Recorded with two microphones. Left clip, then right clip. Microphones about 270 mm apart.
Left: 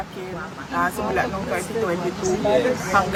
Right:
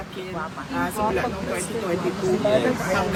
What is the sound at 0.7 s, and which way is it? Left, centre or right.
Speech, centre.